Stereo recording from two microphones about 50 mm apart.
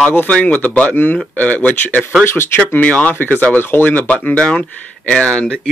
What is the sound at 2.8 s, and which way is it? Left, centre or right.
Speech, left.